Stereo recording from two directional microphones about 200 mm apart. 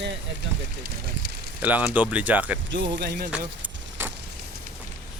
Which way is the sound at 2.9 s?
60° right (ahead or behind).